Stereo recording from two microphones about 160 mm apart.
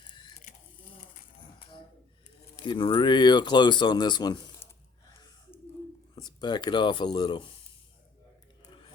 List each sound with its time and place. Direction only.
0.1 s a sound: 30° left (ahead or behind)
2.6 s speech: 30° left (ahead or behind)
6.1 s speech: 25° left (ahead or behind)